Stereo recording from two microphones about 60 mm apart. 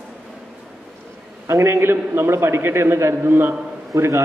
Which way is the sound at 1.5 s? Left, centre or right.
Right.